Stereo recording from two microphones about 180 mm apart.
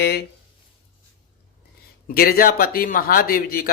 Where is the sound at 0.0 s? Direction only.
65° left (ahead or behind).